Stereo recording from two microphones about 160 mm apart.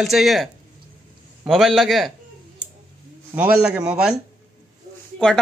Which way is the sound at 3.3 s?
5° right (ahead or behind).